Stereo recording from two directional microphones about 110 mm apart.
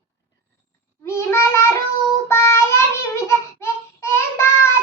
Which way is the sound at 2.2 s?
25° left (ahead or behind).